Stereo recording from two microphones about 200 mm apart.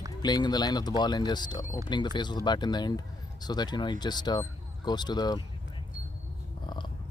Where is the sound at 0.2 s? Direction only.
20° left (ahead or behind).